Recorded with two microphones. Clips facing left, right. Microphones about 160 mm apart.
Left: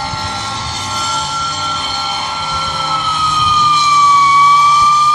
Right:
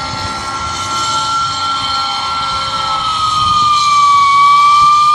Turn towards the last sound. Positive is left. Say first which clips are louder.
# right 1 dB
turn(degrees=40)  # may be behind; listen again after turning